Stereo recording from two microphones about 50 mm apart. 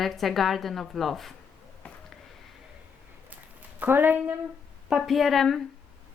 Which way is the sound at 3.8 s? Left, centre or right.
Right.